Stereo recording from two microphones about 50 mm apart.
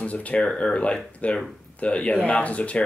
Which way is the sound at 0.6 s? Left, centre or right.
Centre.